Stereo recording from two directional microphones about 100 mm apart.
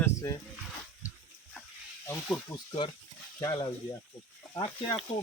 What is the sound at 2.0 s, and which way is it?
Speech, 30° left (ahead or behind).